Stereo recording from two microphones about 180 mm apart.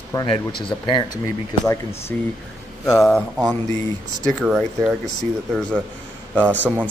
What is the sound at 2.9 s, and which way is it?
Mantra, centre (ahead or behind).